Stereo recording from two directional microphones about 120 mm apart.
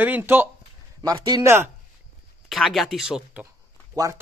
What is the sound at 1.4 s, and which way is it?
Speech, 20° right (ahead or behind).